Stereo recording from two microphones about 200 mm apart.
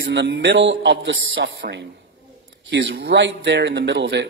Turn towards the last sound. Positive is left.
turn(degrees=-60)  # may be behind; listen again after turning